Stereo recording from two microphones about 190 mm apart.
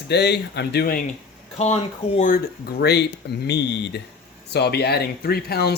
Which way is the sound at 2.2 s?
50° left (ahead or behind).